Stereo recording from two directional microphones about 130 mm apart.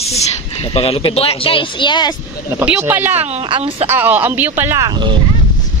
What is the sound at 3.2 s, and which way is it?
Speech, 55° right (ahead or behind).